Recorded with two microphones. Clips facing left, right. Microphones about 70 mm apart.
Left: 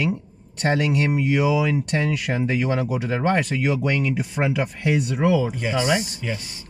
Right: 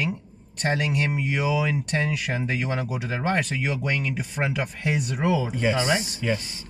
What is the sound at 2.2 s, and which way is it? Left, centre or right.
Speech, centre.